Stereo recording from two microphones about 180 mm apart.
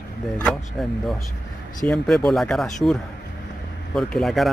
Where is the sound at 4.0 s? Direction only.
5° left (ahead or behind).